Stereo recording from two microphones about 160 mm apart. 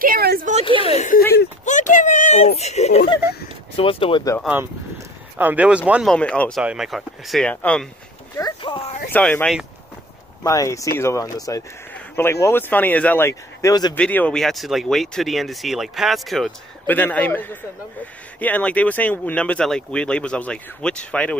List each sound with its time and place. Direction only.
0.0 s a sound: 70° right (ahead or behind)
0.8 s speech: 45° left (ahead or behind)
1.6 s a sound: 50° left (ahead or behind)
3.7 s speech: 35° left (ahead or behind)
5.4 s speech: 10° right (ahead or behind)
6.0 s speech: 5° left (ahead or behind)
6.6 s speech: 5° right (ahead or behind)
8.4 s a sound: 25° left (ahead or behind)
9.1 s speech: 10° left (ahead or behind)
13.9 s speech: 10° left (ahead or behind)
16.8 s speech: 10° left (ahead or behind)